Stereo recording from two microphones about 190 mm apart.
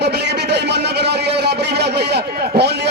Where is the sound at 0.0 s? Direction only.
60° right (ahead or behind).